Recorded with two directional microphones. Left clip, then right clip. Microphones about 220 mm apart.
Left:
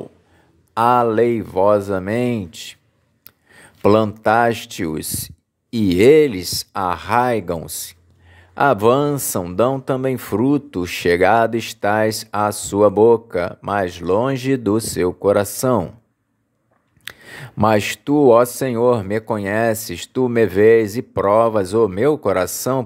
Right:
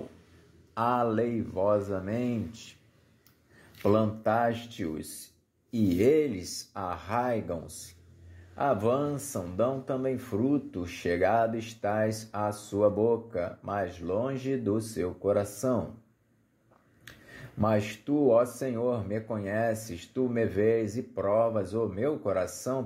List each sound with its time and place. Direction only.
0.7 s speech: 35° left (ahead or behind)
3.8 s speech: 40° left (ahead or behind)
17.0 s speech: 40° left (ahead or behind)